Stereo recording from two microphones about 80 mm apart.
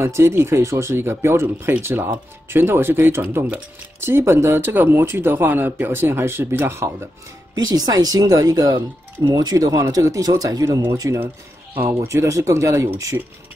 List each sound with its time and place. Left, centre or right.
0.0 s speech: right
7.5 s speech: right
11.1 s speech: right